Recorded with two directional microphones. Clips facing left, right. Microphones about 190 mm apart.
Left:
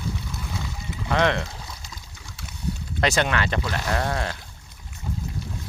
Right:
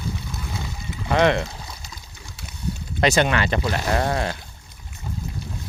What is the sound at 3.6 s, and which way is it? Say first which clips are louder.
Speech: right 4 dB; 15° right (ahead or behind).